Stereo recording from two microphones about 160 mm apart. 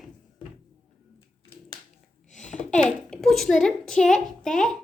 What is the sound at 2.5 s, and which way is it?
A child's voice, 5° left (ahead or behind).